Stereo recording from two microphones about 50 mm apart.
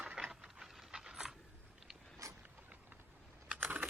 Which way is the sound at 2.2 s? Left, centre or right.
Right.